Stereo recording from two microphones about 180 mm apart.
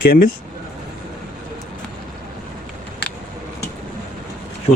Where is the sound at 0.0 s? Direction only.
55° left (ahead or behind).